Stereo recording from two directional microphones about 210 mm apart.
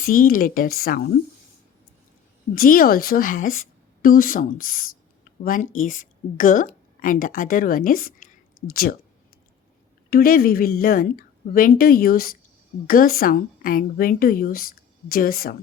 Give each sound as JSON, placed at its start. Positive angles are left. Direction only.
{"t": 0.0, "sound": "a woman's voice", "side_deg": 45}
{"t": 2.6, "sound": "a woman's voice", "side_deg": 45}
{"t": 10.1, "sound": "a woman's voice", "side_deg": 45}